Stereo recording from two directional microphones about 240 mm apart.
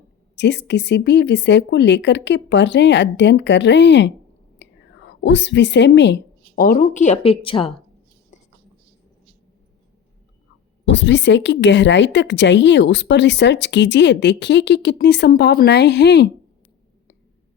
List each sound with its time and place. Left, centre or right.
0.3 s speech: left
4.5 s whispering: left
6.6 s a woman's voice: left
8.3 s whispering: left
10.8 s speech: left